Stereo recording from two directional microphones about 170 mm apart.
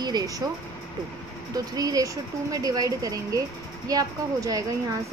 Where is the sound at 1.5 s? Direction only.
20° right (ahead or behind).